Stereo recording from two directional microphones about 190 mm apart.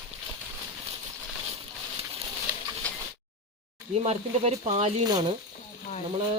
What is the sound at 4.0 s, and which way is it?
Speech, 35° right (ahead or behind).